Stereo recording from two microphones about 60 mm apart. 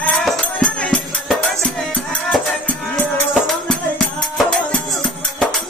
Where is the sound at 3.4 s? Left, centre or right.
Centre.